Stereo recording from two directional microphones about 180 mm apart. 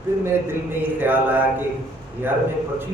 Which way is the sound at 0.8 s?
10° right (ahead or behind).